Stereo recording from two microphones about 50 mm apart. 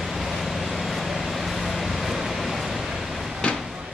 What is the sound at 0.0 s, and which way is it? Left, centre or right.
Vehicle, centre.